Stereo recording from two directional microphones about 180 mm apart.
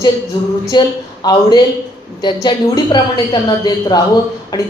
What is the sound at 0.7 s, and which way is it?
A woman's voice, 20° left (ahead or behind).